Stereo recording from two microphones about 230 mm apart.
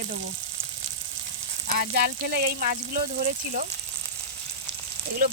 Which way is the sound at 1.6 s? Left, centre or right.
Right.